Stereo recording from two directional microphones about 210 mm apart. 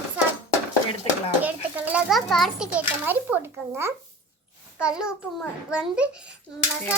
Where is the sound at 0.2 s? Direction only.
5° right (ahead or behind).